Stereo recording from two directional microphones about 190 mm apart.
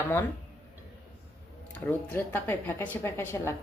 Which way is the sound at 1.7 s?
10° left (ahead or behind).